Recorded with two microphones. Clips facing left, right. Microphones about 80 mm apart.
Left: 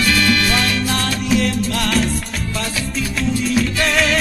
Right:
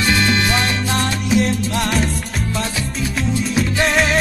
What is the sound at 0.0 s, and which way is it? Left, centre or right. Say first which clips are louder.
Music: even; right.